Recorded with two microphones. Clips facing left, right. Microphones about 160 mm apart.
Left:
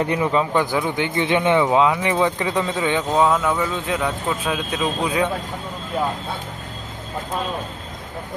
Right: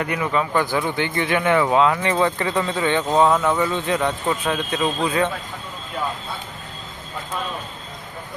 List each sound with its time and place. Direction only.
0.0 s a man's voice: 30° left (ahead or behind)
0.5 s speech: 15° left (ahead or behind)
3.2 s a man's voice: centre (ahead or behind)